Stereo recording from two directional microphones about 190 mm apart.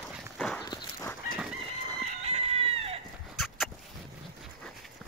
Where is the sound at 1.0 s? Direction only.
Centre (ahead or behind).